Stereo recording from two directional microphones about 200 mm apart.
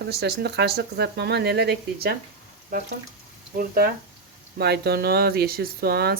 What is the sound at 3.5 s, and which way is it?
Speech, 45° right (ahead or behind).